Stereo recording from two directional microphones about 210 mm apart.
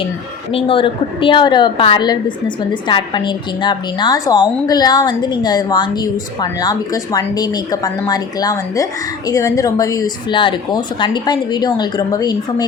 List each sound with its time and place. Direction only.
0.5 s a woman's voice: 25° left (ahead or behind)